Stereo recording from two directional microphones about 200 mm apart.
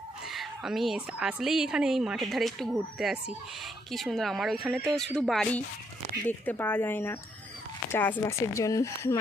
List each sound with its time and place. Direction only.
0.3 s a woman's voice: centre (ahead or behind); by 9.1 s 15° left (ahead or behind)